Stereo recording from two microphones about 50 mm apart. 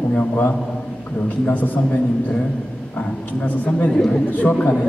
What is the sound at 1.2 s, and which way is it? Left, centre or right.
Speech, left.